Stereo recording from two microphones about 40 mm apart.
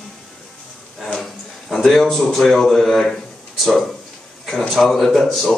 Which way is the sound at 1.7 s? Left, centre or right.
Centre.